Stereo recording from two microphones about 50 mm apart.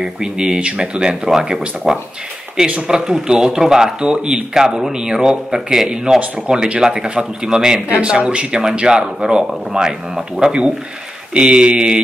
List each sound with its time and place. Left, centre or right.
0.0 s speech: centre